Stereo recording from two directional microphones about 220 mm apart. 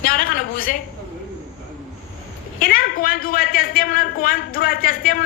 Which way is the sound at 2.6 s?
40° left (ahead or behind).